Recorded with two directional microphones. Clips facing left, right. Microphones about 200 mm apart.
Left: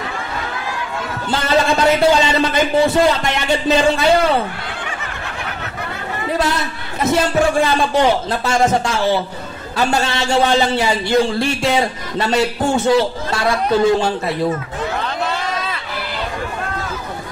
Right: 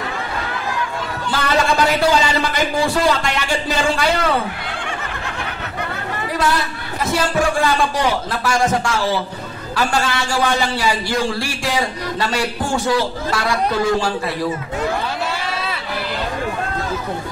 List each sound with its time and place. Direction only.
1.3 s a man's voice: 25° left (ahead or behind)
7.0 s a man's voice: 25° left (ahead or behind)